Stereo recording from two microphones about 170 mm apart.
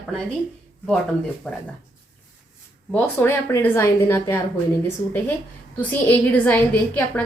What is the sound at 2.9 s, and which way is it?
A woman's voice, 10° left (ahead or behind).